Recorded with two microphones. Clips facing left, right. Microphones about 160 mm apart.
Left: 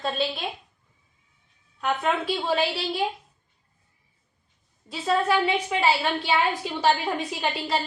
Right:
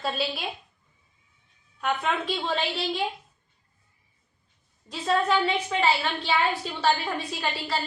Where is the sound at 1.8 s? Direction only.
Centre (ahead or behind).